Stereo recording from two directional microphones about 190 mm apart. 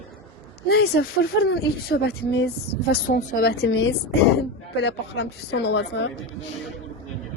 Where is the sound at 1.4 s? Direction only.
55° left (ahead or behind); by 3.9 s 75° left (ahead or behind).